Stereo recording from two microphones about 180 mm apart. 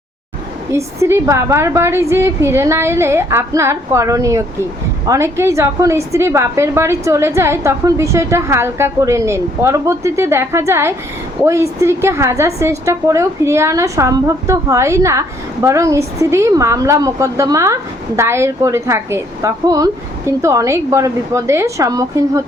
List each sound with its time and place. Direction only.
0.7 s a woman's voice: 15° right (ahead or behind)